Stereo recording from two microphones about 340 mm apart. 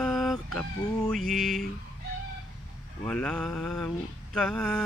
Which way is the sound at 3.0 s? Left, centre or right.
Centre.